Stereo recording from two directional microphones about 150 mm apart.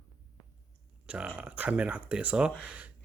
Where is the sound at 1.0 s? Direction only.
5° right (ahead or behind).